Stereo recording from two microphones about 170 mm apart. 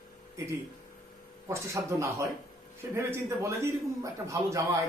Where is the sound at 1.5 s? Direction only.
15° right (ahead or behind).